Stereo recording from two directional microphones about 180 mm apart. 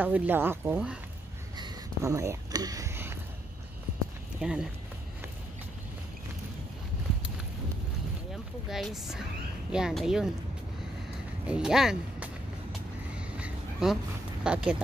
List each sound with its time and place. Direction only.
0.0 s speech: 10° right (ahead or behind)
1.6 s a sound: 15° right (ahead or behind)
4.4 s speech: 5° right (ahead or behind)
8.6 s speech: centre (ahead or behind)
11.4 s speech: 5° right (ahead or behind)
13.1 s a sound: 5° right (ahead or behind)
14.4 s speech: 5° right (ahead or behind)